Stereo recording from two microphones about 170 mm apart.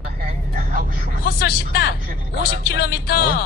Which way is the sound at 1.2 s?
65° left (ahead or behind).